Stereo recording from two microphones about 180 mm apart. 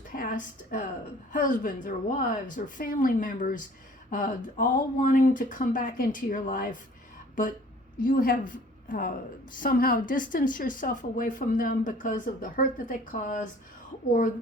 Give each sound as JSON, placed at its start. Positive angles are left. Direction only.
{"t": 0.2, "sound": "a sound", "side_deg": 50}
{"t": 1.3, "sound": "speech", "side_deg": 45}
{"t": 7.9, "sound": "a woman's voice", "side_deg": 50}